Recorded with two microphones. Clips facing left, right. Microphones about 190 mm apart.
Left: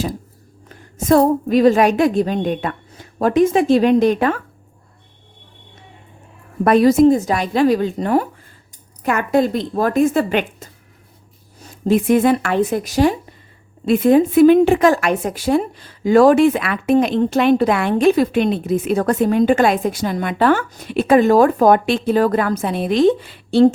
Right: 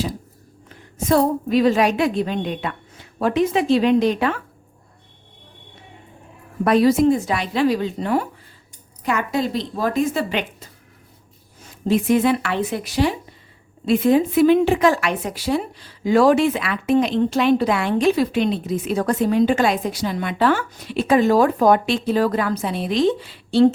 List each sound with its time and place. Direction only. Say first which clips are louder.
0.7 s a woman's voice: left 4 dB; 45° left (ahead or behind)
6.7 s speech: left 4 dB; 50° left (ahead or behind)